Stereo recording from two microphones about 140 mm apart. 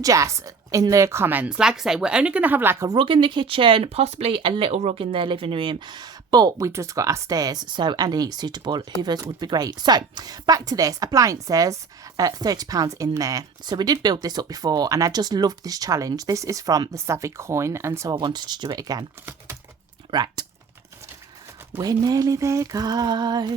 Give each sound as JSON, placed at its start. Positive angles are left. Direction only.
{"t": 0.0, "sound": "a woman's voice", "side_deg": -25}
{"t": 3.0, "sound": "speech", "side_deg": -35}
{"t": 20.1, "sound": "speech", "side_deg": -30}
{"t": 21.8, "sound": "speech", "side_deg": -25}